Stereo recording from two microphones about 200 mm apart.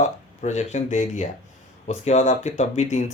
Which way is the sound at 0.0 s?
35° left (ahead or behind).